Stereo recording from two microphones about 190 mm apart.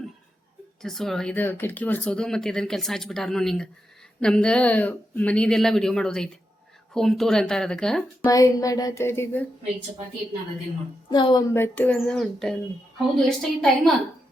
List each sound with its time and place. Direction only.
0.8 s speech: centre (ahead or behind)
8.2 s speech: 20° left (ahead or behind)
11.1 s a woman's voice: 25° left (ahead or behind)
11.5 s speech: 10° left (ahead or behind)